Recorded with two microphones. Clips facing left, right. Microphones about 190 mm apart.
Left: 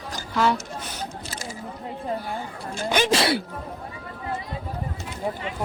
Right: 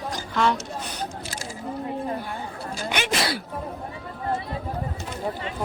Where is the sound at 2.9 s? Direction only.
30° left (ahead or behind).